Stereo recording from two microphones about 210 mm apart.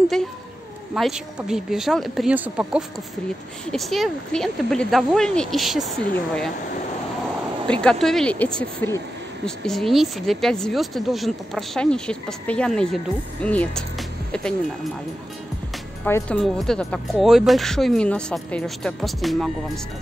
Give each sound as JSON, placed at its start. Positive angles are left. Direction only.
{"t": 0.9, "sound": "a woman's voice", "side_deg": 0}
{"t": 7.8, "sound": "a woman's voice", "side_deg": 5}
{"t": 16.0, "sound": "a woman's voice", "side_deg": 10}